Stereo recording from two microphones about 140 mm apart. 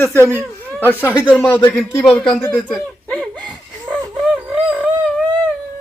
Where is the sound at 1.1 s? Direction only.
10° right (ahead or behind).